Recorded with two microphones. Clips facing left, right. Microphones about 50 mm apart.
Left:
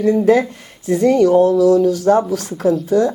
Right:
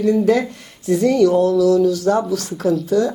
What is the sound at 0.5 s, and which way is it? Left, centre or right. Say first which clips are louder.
Speech: even; left.